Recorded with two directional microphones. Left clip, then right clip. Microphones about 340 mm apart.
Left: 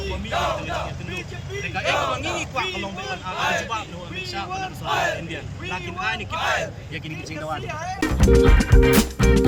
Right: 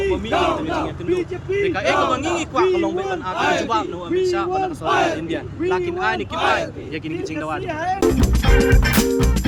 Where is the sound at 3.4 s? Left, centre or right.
Right.